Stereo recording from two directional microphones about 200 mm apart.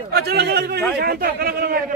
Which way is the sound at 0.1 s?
55° right (ahead or behind).